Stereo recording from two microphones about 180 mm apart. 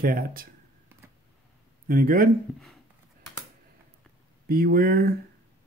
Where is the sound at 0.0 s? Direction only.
55° right (ahead or behind).